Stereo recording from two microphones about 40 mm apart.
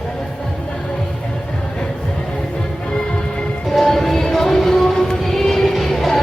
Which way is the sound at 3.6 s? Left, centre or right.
Centre.